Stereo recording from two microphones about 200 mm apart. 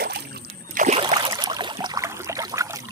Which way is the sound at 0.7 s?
35° right (ahead or behind).